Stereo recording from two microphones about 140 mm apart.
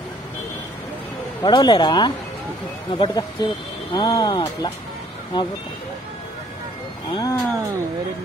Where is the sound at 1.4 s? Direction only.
30° left (ahead or behind).